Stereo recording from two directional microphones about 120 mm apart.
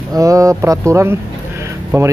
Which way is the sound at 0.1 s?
30° right (ahead or behind).